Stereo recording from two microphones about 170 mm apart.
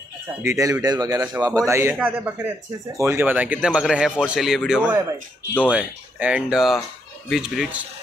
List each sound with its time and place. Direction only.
0.4 s a man's voice: 15° right (ahead or behind)